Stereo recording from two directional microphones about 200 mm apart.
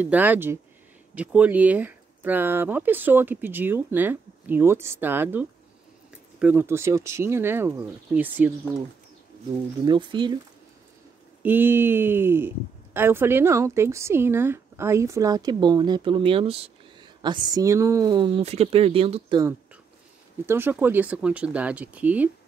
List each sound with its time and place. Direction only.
0.0 s speech: 10° right (ahead or behind)
9.8 s speech: 25° right (ahead or behind)
11.4 s speech: 10° right (ahead or behind)
20.4 s speech: 10° right (ahead or behind)